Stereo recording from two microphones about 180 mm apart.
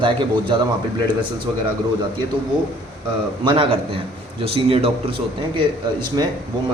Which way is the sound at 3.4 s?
30° right (ahead or behind).